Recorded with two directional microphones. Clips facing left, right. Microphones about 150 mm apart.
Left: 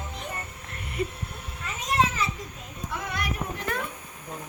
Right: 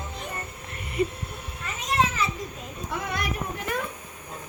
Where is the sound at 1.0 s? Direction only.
Centre (ahead or behind).